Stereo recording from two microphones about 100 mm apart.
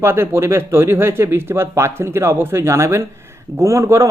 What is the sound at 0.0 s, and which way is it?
Speech, 25° right (ahead or behind).